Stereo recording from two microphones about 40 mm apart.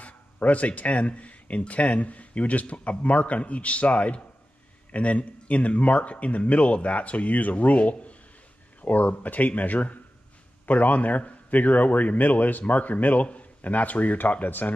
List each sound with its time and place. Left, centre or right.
0.0 s a man's voice: left